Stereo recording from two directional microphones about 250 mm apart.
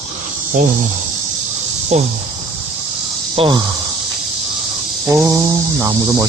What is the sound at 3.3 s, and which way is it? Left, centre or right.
Cricket, centre.